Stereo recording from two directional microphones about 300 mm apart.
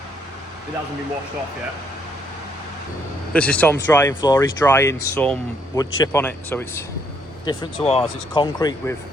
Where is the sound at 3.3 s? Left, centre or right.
Centre.